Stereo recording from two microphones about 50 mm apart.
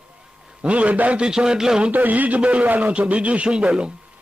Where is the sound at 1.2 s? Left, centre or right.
Centre.